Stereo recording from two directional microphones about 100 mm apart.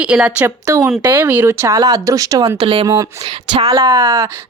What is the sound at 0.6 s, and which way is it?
Speech, 35° right (ahead or behind).